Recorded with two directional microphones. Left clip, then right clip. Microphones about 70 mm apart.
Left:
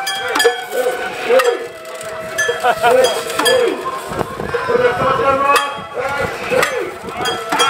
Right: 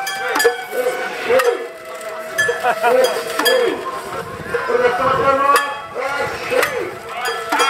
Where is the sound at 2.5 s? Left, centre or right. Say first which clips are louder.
Left 4 dB; left.